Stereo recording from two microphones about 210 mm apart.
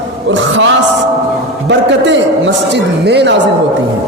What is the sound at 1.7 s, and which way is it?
A man's voice, 55° right (ahead or behind).